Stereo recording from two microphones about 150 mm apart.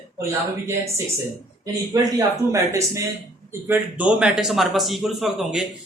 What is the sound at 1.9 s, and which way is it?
Speech, 20° right (ahead or behind).